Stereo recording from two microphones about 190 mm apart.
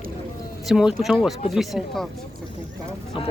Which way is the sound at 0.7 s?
5° right (ahead or behind).